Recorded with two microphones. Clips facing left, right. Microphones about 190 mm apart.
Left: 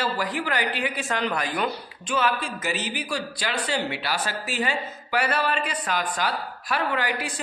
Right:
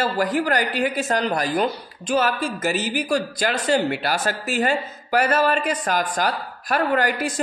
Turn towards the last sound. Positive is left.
turn(degrees=-45)  # may be behind; listen again after turning